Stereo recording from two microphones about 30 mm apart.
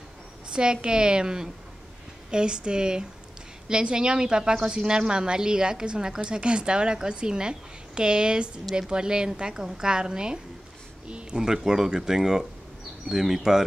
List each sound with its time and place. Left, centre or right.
0.5 s a woman's voice: right
11.1 s speech: right
11.3 s a woman's voice: centre